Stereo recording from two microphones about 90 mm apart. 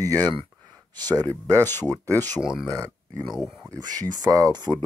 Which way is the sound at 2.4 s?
5° right (ahead or behind).